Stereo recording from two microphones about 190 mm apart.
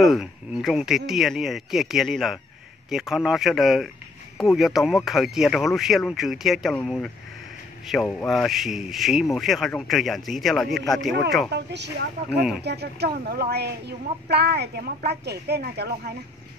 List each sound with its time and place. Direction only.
0.0 s a man's voice: centre (ahead or behind)
11.5 s a woman's voice: 65° right (ahead or behind)